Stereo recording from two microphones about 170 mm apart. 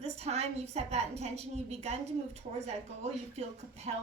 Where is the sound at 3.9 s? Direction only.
40° right (ahead or behind).